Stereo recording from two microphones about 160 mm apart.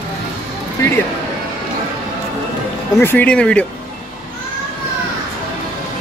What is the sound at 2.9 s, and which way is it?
Speech, 15° left (ahead or behind).